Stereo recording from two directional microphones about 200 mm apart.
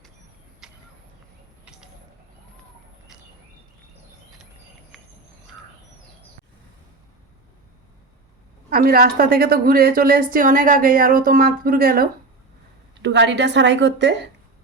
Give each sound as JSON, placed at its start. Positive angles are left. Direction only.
{"t": 0.6, "sound": "a sound", "side_deg": -5}
{"t": 1.6, "sound": "bird", "side_deg": -5}
{"t": 8.7, "sound": "a woman's voice", "side_deg": -50}
{"t": 12.9, "sound": "a woman's voice", "side_deg": -60}